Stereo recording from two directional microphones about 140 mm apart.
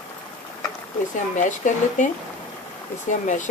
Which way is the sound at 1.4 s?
60° left (ahead or behind).